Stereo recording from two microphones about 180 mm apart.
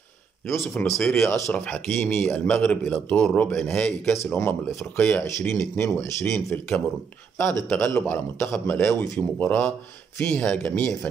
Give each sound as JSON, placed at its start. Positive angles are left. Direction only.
{"t": 0.5, "sound": "a man's voice", "side_deg": 15}